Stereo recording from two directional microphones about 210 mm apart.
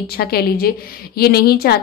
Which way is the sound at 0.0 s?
45° left (ahead or behind).